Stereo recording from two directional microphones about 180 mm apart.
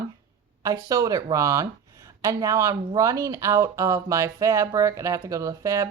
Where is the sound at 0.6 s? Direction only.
20° right (ahead or behind).